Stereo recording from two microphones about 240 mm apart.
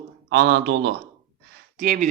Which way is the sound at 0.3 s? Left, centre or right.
Right.